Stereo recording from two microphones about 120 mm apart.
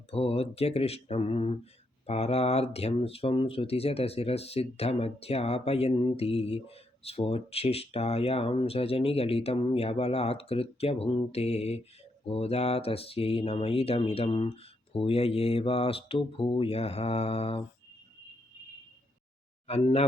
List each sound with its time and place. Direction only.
0.1 s speech: 55° left (ahead or behind)
19.6 s speech: 60° left (ahead or behind)